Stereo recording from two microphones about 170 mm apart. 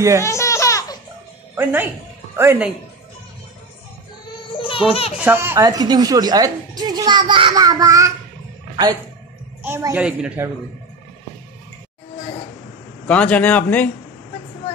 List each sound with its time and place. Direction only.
0.2 s baby laughter: 15° left (ahead or behind)
1.5 s speech: 10° right (ahead or behind)
4.5 s a sound: 30° left (ahead or behind)
5.1 s speech: 10° right (ahead or behind)
9.6 s speech: 15° right (ahead or behind)
13.0 s a man's voice: 10° left (ahead or behind)